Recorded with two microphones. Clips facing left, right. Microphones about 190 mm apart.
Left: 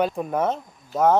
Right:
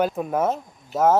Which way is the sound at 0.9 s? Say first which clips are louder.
Even; 20° right (ahead or behind).